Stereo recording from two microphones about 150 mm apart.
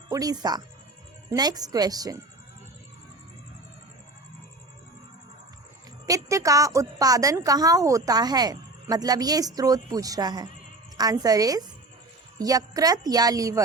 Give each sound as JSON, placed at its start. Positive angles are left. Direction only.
{"t": 0.1, "sound": "a woman's voice", "side_deg": -25}
{"t": 6.1, "sound": "a woman's voice", "side_deg": -20}